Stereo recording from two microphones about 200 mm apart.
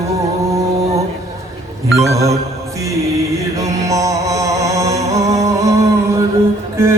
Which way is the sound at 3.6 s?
15° right (ahead or behind).